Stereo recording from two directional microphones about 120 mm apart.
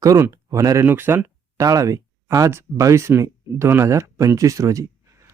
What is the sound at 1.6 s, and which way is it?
Speech, 30° right (ahead or behind).